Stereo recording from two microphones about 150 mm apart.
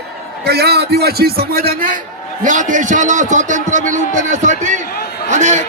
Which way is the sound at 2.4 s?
55° right (ahead or behind).